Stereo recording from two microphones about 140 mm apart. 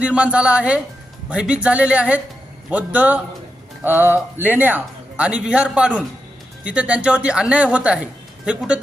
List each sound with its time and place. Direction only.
0.0 s a man's voice: 10° right (ahead or behind)